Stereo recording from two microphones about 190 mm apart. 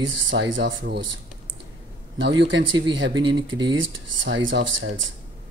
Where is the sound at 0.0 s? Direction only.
80° right.